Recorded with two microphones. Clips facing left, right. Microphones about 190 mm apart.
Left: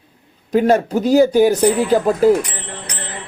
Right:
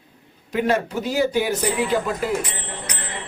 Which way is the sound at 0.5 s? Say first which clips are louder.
Left 7 dB; 40° left (ahead or behind).